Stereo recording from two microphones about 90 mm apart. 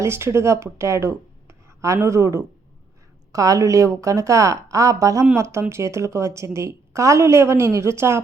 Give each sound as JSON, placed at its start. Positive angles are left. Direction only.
{"t": 0.0, "sound": "a woman's voice", "side_deg": -30}